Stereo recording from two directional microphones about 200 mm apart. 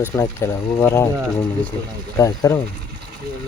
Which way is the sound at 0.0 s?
10° left (ahead or behind).